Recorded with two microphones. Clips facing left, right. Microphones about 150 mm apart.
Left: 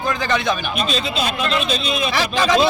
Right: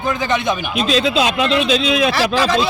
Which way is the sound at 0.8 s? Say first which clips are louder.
Right 6 dB; 90° right.